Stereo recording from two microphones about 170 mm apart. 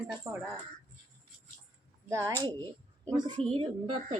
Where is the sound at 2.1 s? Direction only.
20° right (ahead or behind).